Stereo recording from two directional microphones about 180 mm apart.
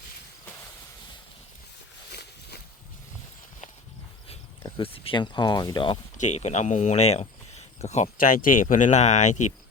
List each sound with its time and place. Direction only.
4.8 s speech: 30° left (ahead or behind)
6.1 s speech: 40° left (ahead or behind)